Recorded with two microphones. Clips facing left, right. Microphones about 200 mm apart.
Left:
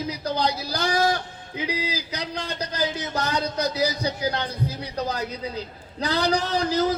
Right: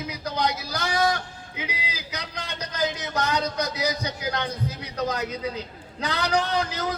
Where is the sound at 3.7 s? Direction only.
30° left (ahead or behind).